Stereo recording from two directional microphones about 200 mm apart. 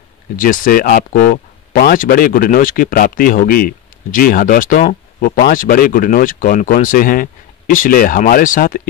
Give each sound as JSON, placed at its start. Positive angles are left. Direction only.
{"t": 0.4, "sound": "speech", "side_deg": 45}